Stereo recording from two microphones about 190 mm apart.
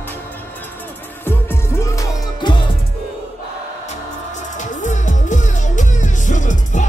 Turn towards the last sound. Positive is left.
turn(degrees=40)  # may be behind; listen again after turning